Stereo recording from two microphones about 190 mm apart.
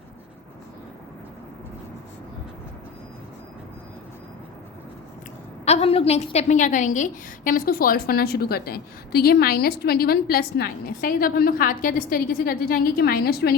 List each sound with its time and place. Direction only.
5.6 s a woman's voice: 35° left (ahead or behind); by 13.6 s 55° left (ahead or behind)